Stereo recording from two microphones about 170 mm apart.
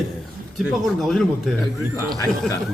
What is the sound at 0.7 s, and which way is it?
Speech, centre (ahead or behind).